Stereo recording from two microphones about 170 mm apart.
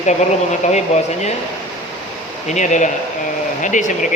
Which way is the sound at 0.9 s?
40° left (ahead or behind).